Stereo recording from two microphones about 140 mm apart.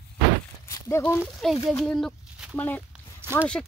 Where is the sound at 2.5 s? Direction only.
15° left (ahead or behind).